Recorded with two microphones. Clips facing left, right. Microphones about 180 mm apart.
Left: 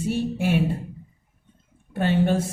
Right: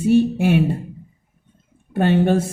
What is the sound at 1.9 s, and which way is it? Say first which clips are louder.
Speech: right 6 dB; 60° right (ahead or behind).